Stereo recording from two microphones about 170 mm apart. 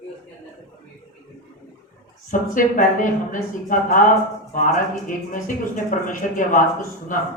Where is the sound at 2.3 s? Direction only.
50° left (ahead or behind).